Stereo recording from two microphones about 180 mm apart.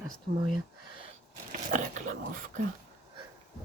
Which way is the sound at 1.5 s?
45° right (ahead or behind).